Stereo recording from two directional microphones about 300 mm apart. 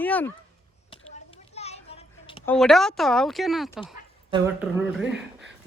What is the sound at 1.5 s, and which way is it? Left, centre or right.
Children playing, left.